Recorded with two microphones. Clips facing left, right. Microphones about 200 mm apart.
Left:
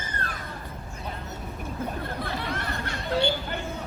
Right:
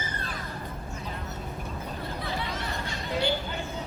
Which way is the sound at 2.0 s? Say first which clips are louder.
Left 2 dB; 55° left (ahead or behind).